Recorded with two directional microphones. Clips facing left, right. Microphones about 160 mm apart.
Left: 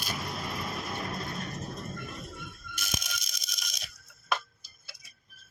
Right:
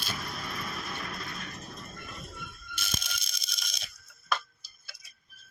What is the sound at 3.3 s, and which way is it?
Scrape, 45° left (ahead or behind).